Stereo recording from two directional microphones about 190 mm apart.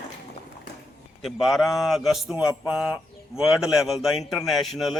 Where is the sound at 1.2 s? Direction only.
Centre (ahead or behind).